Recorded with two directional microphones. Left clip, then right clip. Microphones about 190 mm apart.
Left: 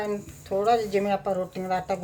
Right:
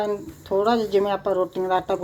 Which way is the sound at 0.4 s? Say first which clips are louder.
Right 2 dB; 25° right (ahead or behind).